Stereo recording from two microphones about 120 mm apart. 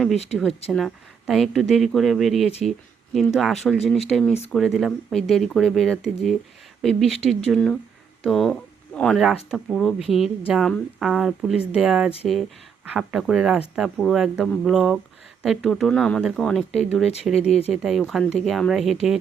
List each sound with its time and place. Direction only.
0.7 s speech: centre (ahead or behind)
9.2 s speech: 5° right (ahead or behind)